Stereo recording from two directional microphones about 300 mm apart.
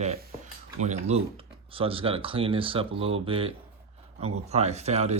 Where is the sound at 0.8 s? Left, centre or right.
Right.